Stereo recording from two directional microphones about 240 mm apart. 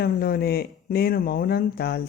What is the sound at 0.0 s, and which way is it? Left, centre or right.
Speech, left.